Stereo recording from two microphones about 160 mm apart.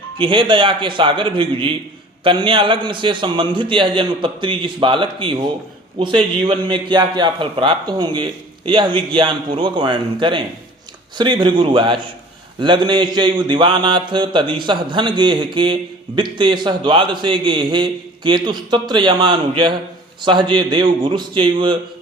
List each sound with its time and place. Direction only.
0.2 s a man's voice: 30° right (ahead or behind)
12.5 s a sound: 30° right (ahead or behind)
20.2 s a man's voice: 30° right (ahead or behind)